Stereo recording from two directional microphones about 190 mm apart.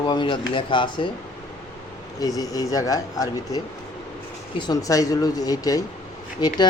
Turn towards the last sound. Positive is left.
turn(degrees=20)  # may be behind; listen again after turning